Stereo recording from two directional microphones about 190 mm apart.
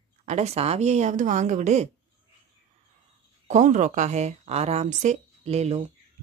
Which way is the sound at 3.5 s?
40° right (ahead or behind).